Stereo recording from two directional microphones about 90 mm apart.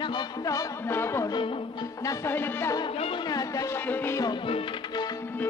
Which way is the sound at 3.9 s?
20° left (ahead or behind).